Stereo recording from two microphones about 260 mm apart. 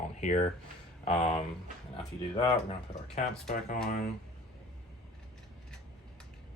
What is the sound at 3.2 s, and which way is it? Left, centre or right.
Speech, left.